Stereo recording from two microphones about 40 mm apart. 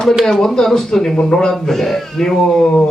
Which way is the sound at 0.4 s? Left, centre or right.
Centre.